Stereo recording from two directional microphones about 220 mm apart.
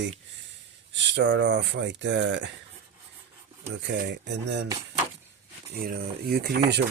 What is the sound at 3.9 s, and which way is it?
Rub, 50° right (ahead or behind).